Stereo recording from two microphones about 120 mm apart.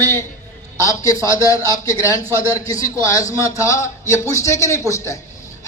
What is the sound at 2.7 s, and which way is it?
A man's voice, 30° left (ahead or behind).